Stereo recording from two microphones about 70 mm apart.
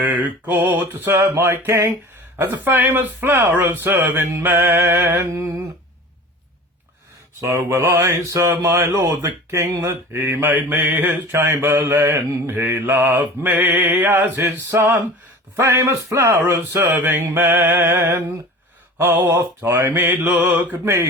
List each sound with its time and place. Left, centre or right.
0.0 s speech: right
1.3 s mantra: right
2.4 s speech: right
7.7 s mantra: right
9.6 s mantra: right
10.5 s speech: right
11.6 s mantra: right
15.5 s mantra: right
16.3 s speech: right
18.9 s mantra: right
19.7 s speech: right